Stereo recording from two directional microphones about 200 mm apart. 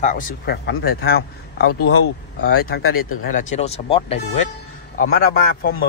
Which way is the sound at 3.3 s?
35° left (ahead or behind).